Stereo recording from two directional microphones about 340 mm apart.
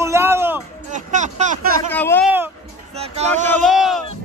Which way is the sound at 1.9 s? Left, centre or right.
Centre.